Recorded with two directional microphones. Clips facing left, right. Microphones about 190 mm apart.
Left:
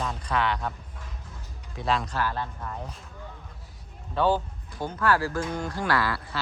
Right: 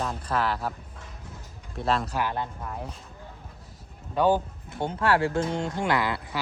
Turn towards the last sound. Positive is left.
turn(degrees=-20)  # may be behind; listen again after turning